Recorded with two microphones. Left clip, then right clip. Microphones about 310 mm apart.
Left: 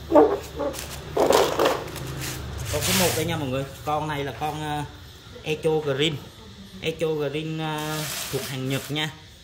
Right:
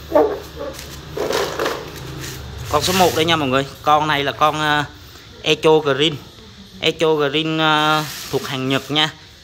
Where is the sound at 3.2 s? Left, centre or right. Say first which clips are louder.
Right 11 dB; centre.